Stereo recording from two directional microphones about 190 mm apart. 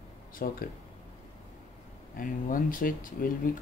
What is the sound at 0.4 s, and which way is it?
Speech, 50° left (ahead or behind).